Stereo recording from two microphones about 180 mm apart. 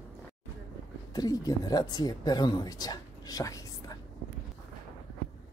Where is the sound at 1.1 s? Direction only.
20° left (ahead or behind).